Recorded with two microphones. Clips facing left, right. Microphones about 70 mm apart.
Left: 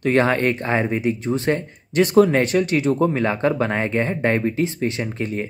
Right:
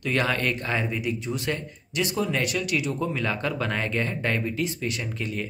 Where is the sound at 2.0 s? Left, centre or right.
Left.